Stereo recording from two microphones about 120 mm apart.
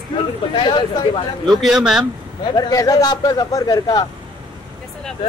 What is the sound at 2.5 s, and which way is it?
A man's voice, 30° left (ahead or behind).